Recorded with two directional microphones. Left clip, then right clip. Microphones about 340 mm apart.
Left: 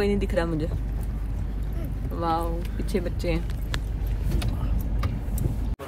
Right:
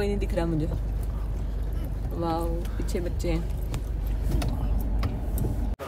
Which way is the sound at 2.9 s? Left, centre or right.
Left.